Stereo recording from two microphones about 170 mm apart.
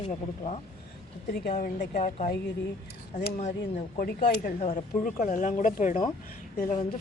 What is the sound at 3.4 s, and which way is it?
Speech, 45° left (ahead or behind).